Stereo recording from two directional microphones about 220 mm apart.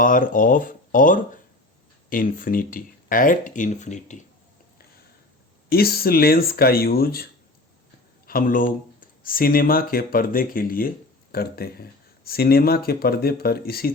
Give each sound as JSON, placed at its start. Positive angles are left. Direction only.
{"t": 0.0, "sound": "speech", "side_deg": 40}
{"t": 5.6, "sound": "speech", "side_deg": 45}
{"t": 8.3, "sound": "speech", "side_deg": 40}